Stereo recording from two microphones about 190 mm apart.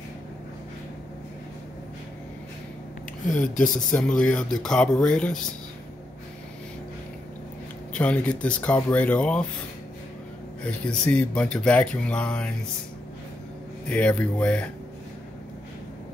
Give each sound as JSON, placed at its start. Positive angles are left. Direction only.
{"t": 3.5, "sound": "speech", "side_deg": 45}
{"t": 3.9, "sound": "speech", "side_deg": 5}
{"t": 7.9, "sound": "speech", "side_deg": 5}
{"t": 10.9, "sound": "speech", "side_deg": 5}
{"t": 13.8, "sound": "speech", "side_deg": 5}